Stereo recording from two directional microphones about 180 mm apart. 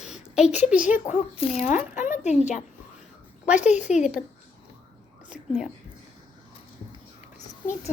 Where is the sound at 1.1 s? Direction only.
35° left (ahead or behind).